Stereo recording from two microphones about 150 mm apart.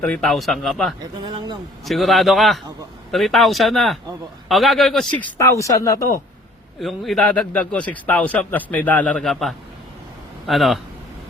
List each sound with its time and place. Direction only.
0.0 s speech: 5° left (ahead or behind)
1.2 s speech: 30° right (ahead or behind)
1.8 s a man's voice: centre (ahead or behind); by 6.1 s 20° left (ahead or behind)
6.7 s a man's voice: centre (ahead or behind)